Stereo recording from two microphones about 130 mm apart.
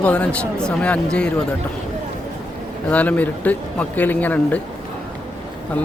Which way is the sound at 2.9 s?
10° left (ahead or behind).